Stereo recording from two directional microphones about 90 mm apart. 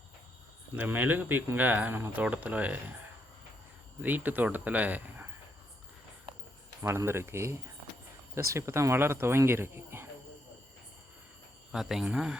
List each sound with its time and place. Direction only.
0.8 s speech: 20° right (ahead or behind)
4.0 s speech: 20° right (ahead or behind)
6.8 s speech: 30° right (ahead or behind)
11.7 s speech: 5° right (ahead or behind)